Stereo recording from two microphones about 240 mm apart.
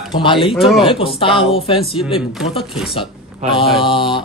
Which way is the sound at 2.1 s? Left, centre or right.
Centre.